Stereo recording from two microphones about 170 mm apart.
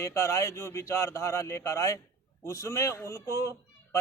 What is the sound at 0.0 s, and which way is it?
A man's voice, 15° left (ahead or behind).